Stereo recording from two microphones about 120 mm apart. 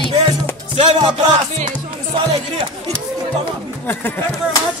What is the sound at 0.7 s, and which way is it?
Music, 55° right (ahead or behind).